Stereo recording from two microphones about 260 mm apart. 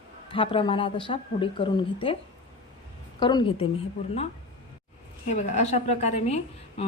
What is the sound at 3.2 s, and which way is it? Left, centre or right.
Speech, centre.